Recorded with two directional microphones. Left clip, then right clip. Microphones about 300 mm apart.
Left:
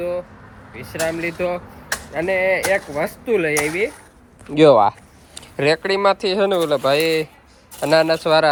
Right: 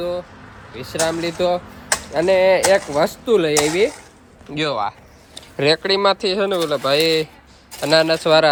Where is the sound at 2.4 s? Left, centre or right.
Right.